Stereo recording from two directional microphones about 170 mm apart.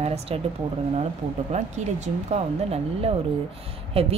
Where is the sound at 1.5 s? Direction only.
45° right (ahead or behind).